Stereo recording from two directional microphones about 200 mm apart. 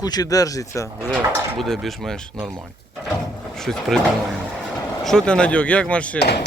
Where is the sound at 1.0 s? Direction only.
Centre (ahead or behind).